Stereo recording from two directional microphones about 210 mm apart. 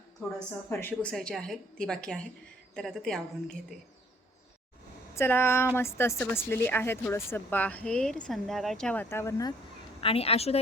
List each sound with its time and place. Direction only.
0.7 s a woman's voice: 10° left (ahead or behind)
5.1 s speech: 10° left (ahead or behind)
10.0 s a woman's voice: 25° left (ahead or behind)